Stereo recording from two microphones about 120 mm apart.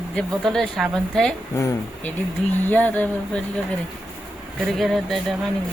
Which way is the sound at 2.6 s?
15° left (ahead or behind).